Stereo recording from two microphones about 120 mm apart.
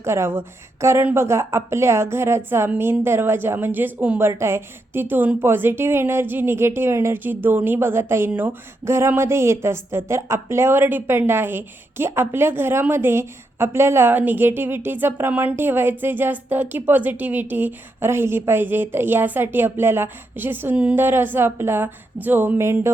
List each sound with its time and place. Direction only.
0.0 s a woman's voice: 20° right (ahead or behind)